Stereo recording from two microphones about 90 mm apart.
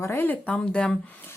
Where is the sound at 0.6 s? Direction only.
10° left (ahead or behind).